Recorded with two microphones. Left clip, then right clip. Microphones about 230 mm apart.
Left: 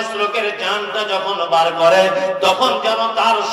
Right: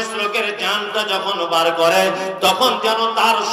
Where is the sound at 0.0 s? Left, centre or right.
Right.